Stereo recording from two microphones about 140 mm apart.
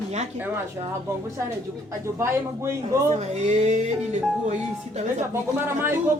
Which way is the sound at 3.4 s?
55° right (ahead or behind).